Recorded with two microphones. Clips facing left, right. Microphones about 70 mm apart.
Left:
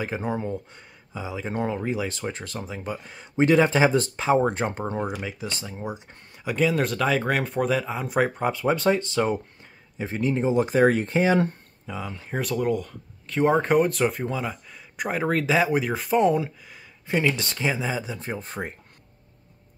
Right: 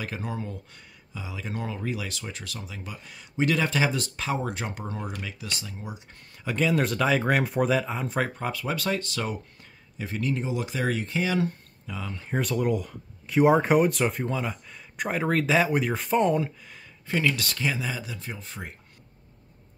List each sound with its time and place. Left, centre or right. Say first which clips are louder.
0.0 s speech: left 6 dB; left
6.4 s speech: left 2 dB; centre
8.1 s speech: left 9 dB; centre; by 11.5 s left
11.8 s speech: left 3 dB; centre
12.3 s speech: left 1 dB; centre
17.0 s speech: left 2 dB; left
18.2 s speech: left 7 dB; left